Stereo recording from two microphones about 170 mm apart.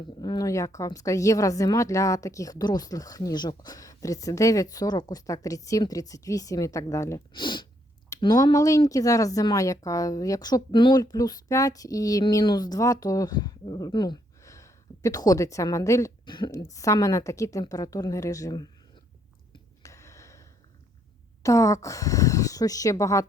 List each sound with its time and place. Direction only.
0.2 s speech: 20° left (ahead or behind)
19.5 s a sound: 20° left (ahead or behind)
21.4 s speech: 20° left (ahead or behind)